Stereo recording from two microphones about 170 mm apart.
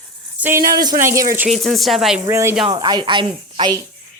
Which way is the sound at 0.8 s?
20° right (ahead or behind).